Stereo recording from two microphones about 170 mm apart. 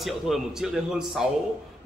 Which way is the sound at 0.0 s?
Centre (ahead or behind).